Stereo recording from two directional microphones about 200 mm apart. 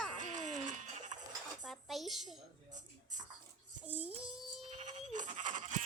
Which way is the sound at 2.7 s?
40° right (ahead or behind).